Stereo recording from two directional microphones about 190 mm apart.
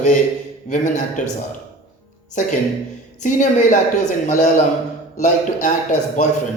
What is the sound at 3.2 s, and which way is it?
A man's voice, 40° left (ahead or behind).